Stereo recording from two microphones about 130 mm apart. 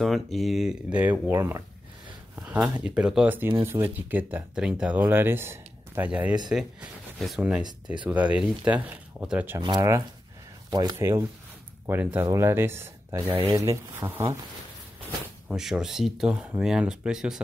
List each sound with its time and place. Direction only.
0.0 s speech: centre (ahead or behind); by 1.6 s 20° right (ahead or behind)
2.3 s speech: 10° right (ahead or behind)
9.6 s speech: 35° right (ahead or behind)
11.0 s speech: 20° right (ahead or behind)
15.4 s speech: 5° right (ahead or behind)